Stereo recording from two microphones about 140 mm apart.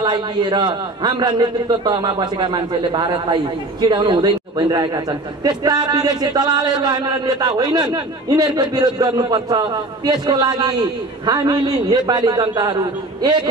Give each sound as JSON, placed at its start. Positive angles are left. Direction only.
{"t": 0.0, "sound": "a man's voice", "side_deg": -30}